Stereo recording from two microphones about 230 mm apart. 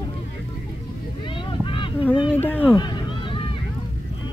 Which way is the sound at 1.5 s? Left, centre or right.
Left.